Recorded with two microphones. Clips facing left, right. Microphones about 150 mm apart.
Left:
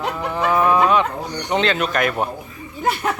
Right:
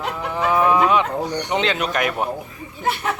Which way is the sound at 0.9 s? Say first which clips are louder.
Even; 15° right (ahead or behind).